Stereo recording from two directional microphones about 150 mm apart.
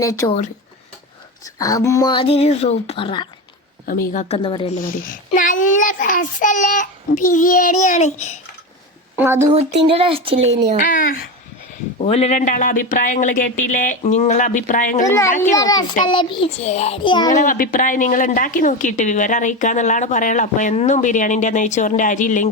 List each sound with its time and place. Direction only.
0.0 s a child's voice: 20° left (ahead or behind)
0.3 s speech: 45° left (ahead or behind)
1.5 s speech: 20° left (ahead or behind)
3.8 s speech: 60° left (ahead or behind)
4.4 s speech: 35° left (ahead or behind)
4.8 s a child's voice: 65° left (ahead or behind); by 8.4 s 50° left (ahead or behind)
9.1 s speech: 15° right (ahead or behind)
9.5 s speech: 35° right (ahead or behind)
10.8 s a woman's voice: 60° left (ahead or behind)
11.9 s a woman's voice: 45° left (ahead or behind)
15.0 s a child's voice: 20° left (ahead or behind)
16.6 s speech: 45° left (ahead or behind); by 17.3 s 30° left (ahead or behind)
17.3 s a woman's voice: 65° left (ahead or behind)